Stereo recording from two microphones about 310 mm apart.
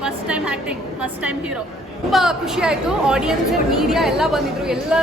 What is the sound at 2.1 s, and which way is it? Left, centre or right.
A woman's voice, centre.